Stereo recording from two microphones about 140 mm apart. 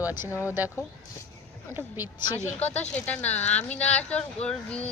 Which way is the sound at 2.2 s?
30° left (ahead or behind).